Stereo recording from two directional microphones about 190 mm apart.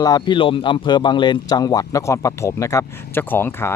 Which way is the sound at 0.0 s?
20° left (ahead or behind).